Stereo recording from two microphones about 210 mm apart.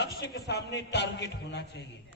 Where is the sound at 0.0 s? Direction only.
50° left (ahead or behind).